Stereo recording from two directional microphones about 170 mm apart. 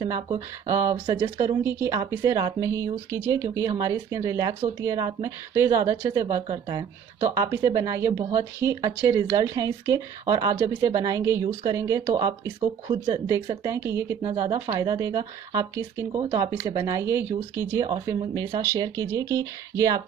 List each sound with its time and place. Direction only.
0.0 s speech: 20° right (ahead or behind)
1.6 s a woman's voice: 15° right (ahead or behind)
14.2 s speech: 35° right (ahead or behind)
14.8 s speech: 20° right (ahead or behind)
17.8 s speech: 30° right (ahead or behind)